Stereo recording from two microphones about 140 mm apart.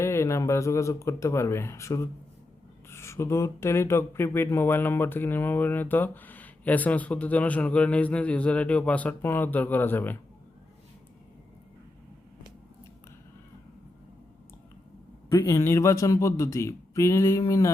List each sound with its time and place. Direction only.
0.0 s a man's voice: 20° left (ahead or behind)
15.4 s a man's voice: 20° left (ahead or behind)